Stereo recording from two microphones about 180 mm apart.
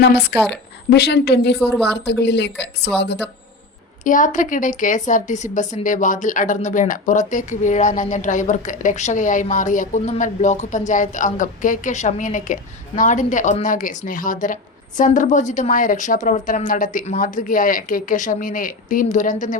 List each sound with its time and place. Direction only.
0.0 s a woman's voice: 70° left (ahead or behind)
0.3 s a woman's voice: 5° left (ahead or behind)
0.9 s a woman's voice: 65° left (ahead or behind)
1.5 s a woman's voice: centre (ahead or behind)
1.8 s a woman's voice: 70° left (ahead or behind)
4.0 s a woman's voice: 45° left (ahead or behind)